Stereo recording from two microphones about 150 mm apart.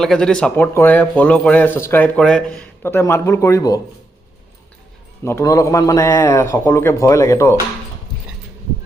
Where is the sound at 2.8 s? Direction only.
15° left (ahead or behind).